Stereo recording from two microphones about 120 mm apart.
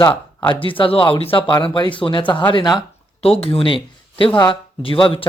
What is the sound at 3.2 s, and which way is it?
Speech, 55° left (ahead or behind).